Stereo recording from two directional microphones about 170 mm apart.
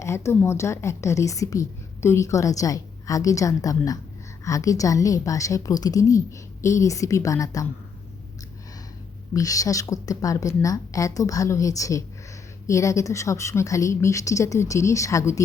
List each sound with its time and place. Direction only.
0.0 s a woman's voice: 15° left (ahead or behind)
9.3 s a woman's voice: 20° left (ahead or behind)